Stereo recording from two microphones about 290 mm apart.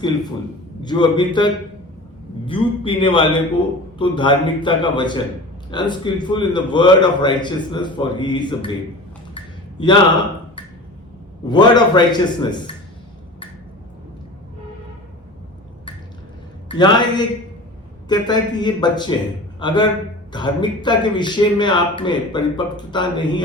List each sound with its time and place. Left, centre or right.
0.8 s speech: centre
2.5 s speech: centre
9.8 s speech: centre
16.6 s a man's voice: centre